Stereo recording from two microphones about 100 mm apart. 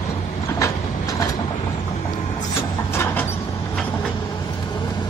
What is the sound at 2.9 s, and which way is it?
Mechanisms, 25° left (ahead or behind).